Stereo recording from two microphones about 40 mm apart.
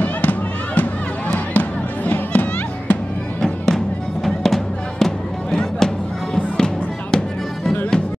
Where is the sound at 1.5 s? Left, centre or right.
Left.